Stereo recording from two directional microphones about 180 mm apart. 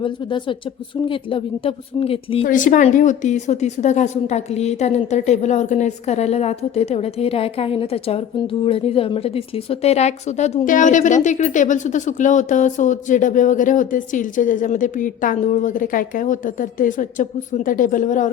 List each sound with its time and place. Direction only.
0.0 s a woman's voice: 25° left (ahead or behind)
2.5 s a woman's voice: 45° left (ahead or behind)